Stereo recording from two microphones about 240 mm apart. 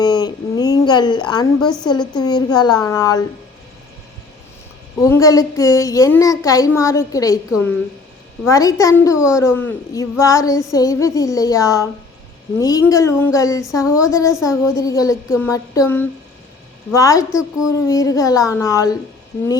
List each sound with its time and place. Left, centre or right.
0.0 s a sound: centre
1.8 s female singing: centre
4.9 s female singing: centre
8.4 s female singing: centre
13.8 s a woman's voice: centre
14.1 s female singing: centre